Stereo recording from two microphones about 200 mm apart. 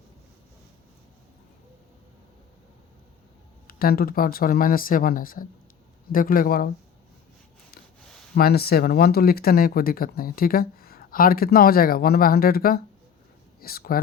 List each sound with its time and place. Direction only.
3.7 s speech: 50° left (ahead or behind)
8.4 s speech: 50° left (ahead or behind)